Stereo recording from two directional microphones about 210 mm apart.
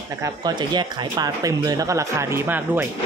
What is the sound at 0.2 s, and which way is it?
Speech, 20° right (ahead or behind).